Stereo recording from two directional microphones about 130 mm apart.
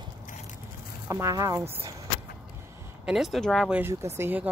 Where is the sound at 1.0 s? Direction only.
25° right (ahead or behind).